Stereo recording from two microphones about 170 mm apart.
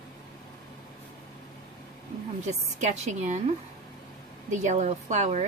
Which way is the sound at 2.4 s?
45° right (ahead or behind).